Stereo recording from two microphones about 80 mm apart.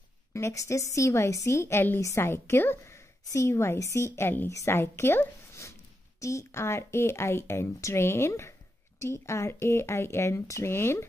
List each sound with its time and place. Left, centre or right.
0.3 s a woman's voice: left